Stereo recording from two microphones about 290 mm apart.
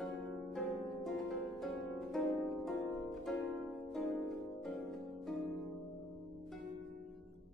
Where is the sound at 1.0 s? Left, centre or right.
Centre.